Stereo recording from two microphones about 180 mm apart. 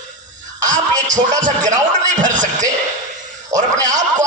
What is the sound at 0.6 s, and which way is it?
Speech, 45° right (ahead or behind).